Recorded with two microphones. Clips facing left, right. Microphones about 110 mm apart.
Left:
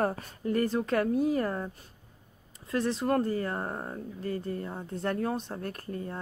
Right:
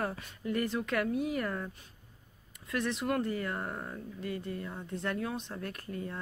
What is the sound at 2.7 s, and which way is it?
A woman's voice, 35° left (ahead or behind).